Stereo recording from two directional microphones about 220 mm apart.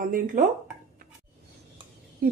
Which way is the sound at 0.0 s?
40° right (ahead or behind).